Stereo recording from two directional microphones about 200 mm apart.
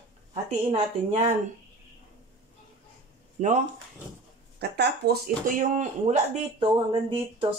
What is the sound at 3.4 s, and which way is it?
Speech, 40° right (ahead or behind).